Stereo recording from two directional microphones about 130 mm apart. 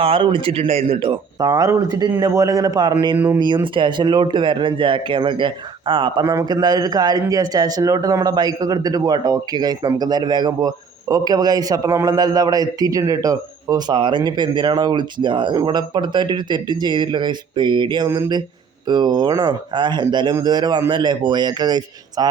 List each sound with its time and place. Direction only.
0.0 s a man's voice: 40° right (ahead or behind)